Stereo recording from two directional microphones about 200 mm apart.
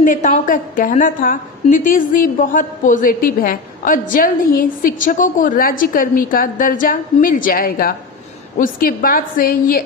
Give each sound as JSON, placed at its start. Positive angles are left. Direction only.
{"t": 0.0, "sound": "a woman's voice", "side_deg": 40}